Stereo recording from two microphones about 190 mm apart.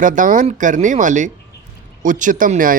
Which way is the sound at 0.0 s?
45° right (ahead or behind).